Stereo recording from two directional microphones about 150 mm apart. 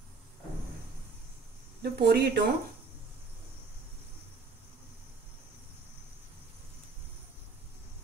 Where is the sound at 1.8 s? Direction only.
90° right.